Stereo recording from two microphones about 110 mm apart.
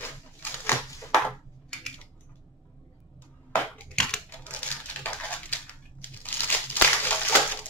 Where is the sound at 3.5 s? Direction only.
15° left (ahead or behind).